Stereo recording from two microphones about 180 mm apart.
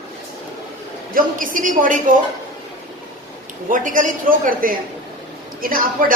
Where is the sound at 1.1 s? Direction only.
50° right (ahead or behind).